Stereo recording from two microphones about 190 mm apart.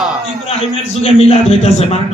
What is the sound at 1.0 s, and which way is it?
Speech, 30° left (ahead or behind).